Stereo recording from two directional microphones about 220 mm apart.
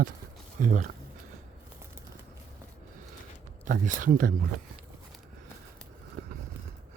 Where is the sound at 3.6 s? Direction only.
35° right (ahead or behind).